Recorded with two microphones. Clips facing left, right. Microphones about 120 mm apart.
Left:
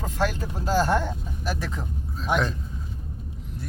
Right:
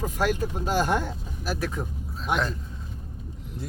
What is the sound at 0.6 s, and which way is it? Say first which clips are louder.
Speech: left 5 dB; 15° right (ahead or behind).